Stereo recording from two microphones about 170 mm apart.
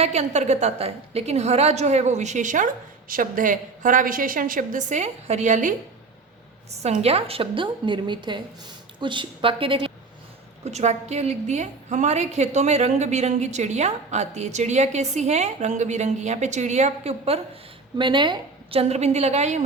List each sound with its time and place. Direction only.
0.0 s a woman's voice: 40° right (ahead or behind)
6.8 s a woman's voice: 40° right (ahead or behind)